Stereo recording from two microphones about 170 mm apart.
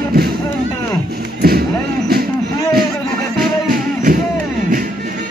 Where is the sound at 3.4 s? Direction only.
60° right (ahead or behind).